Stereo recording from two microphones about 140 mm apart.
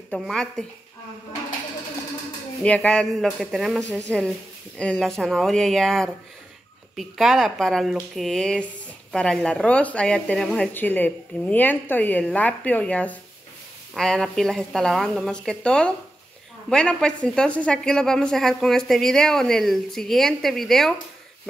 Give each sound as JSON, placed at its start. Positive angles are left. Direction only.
{"t": 0.2, "sound": "a woman's voice", "side_deg": 5}
{"t": 2.6, "sound": "a woman's voice", "side_deg": 10}